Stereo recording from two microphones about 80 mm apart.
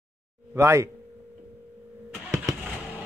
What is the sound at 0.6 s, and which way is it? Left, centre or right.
Speech, right.